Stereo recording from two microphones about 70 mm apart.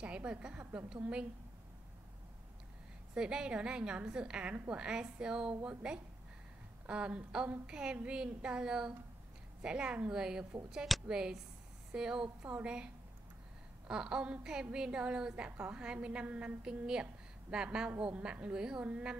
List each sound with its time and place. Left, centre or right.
0.0 s a woman's voice: centre
3.2 s a woman's voice: centre
12.4 s a woman's voice: right
13.8 s a woman's voice: centre
15.5 s a woman's voice: right